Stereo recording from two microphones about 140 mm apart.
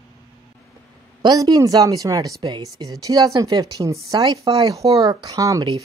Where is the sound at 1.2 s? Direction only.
30° right (ahead or behind).